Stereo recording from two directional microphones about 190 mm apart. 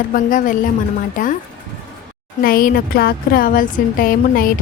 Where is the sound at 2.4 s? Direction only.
50° left (ahead or behind).